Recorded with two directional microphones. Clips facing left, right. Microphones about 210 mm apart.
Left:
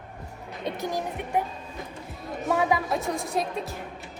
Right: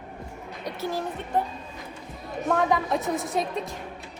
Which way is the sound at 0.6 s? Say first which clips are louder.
Even; 20° left (ahead or behind).